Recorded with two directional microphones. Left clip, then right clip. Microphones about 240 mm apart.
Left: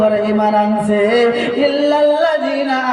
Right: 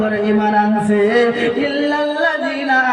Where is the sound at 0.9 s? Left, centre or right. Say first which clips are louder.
Left 1 dB; left.